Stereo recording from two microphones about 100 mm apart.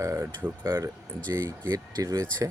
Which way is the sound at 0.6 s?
35° right (ahead or behind).